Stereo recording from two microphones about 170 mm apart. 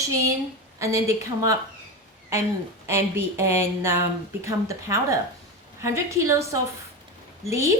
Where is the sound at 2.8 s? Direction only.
15° right (ahead or behind).